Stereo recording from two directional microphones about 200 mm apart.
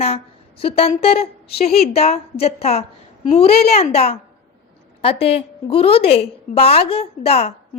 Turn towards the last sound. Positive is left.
turn(degrees=30)  # may be behind; listen again after turning